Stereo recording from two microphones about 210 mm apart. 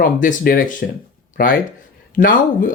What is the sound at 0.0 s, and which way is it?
Speech, 40° left (ahead or behind).